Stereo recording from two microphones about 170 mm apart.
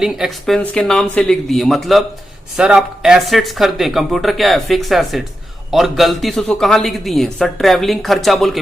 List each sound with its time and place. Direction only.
0.0 s speech: centre (ahead or behind)